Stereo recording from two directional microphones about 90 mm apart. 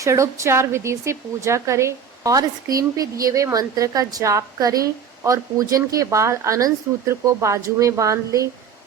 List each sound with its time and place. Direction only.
0.0 s speech: 35° right (ahead or behind)